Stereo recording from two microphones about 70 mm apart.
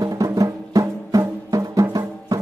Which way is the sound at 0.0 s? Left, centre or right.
Right.